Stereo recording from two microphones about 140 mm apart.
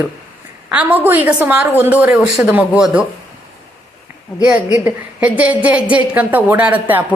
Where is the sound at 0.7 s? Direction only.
10° right (ahead or behind).